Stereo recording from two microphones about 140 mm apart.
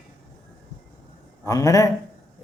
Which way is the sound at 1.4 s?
25° left (ahead or behind).